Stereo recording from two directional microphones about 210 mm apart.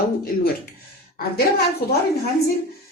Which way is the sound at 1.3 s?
50° left (ahead or behind).